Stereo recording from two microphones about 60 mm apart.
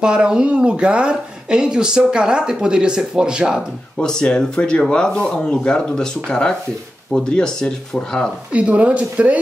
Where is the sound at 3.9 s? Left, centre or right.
Centre.